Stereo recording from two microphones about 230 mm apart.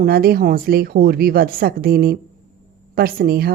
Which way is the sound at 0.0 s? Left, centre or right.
Right.